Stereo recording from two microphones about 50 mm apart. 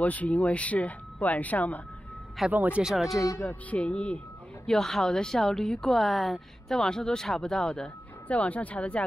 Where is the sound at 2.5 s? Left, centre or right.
Right.